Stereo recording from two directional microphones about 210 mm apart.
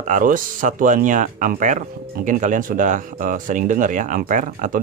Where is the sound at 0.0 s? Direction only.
40° right (ahead or behind).